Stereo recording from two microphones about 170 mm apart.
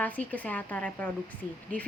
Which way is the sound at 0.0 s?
10° left (ahead or behind).